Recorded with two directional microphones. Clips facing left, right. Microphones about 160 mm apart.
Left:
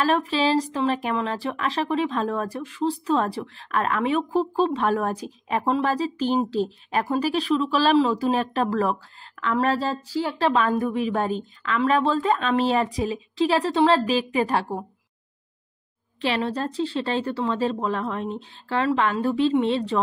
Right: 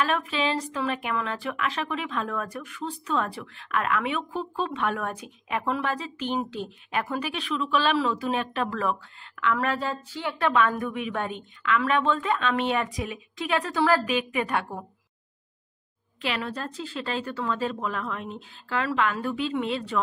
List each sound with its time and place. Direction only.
0.0 s speech: 35° left (ahead or behind)
16.2 s speech: 35° left (ahead or behind)